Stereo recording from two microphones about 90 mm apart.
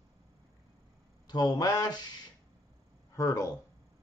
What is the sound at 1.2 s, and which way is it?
Speech, 45° left (ahead or behind).